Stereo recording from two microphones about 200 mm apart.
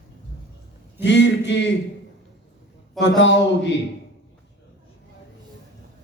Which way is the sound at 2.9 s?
60° left (ahead or behind).